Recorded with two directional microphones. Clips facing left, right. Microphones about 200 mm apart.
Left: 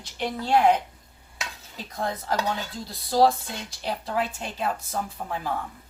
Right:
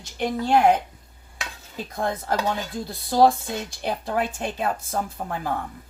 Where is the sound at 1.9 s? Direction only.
50° right (ahead or behind).